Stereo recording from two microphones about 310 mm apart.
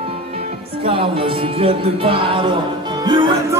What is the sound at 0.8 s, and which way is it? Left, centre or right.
Music, centre.